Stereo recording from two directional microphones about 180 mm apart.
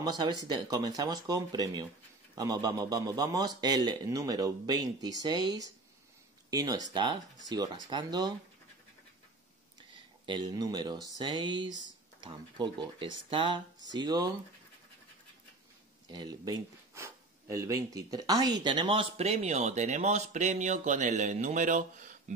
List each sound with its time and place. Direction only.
0.0 s a man's voice: 20° right (ahead or behind)
10.2 s a man's voice: 25° right (ahead or behind)
16.1 s speech: 20° right (ahead or behind); by 22.1 s 45° right (ahead or behind)